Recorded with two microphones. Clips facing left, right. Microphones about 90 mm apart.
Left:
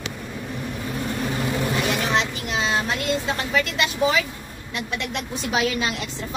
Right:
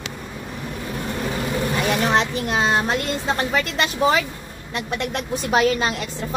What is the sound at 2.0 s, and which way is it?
A child's voice, 40° right (ahead or behind).